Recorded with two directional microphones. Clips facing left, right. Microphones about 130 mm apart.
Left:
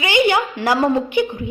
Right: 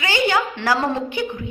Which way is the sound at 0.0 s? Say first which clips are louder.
Left 4 dB; 15° left (ahead or behind).